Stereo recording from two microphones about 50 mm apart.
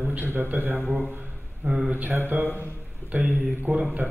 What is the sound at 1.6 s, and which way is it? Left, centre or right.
Speech, centre.